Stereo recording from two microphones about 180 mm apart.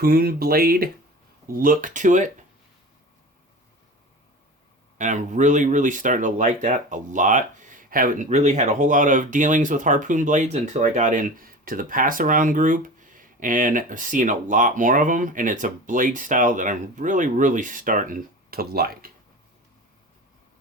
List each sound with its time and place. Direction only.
0.0 s speech: 60° right (ahead or behind)
4.9 s speech: 45° right (ahead or behind); by 19.1 s 60° right (ahead or behind)